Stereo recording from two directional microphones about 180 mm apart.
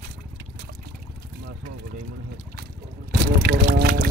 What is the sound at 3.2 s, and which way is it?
Music, 65° right (ahead or behind).